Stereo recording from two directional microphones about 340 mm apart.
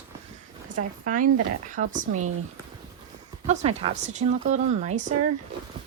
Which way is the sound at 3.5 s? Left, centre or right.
Centre.